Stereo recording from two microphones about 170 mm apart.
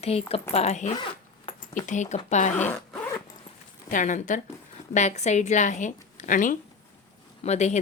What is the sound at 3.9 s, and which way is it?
Speech, 50° left (ahead or behind).